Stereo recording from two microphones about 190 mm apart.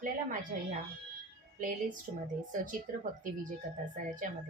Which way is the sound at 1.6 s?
45° right (ahead or behind).